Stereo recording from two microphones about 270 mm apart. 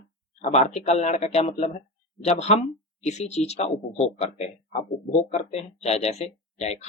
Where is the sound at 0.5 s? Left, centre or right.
Left.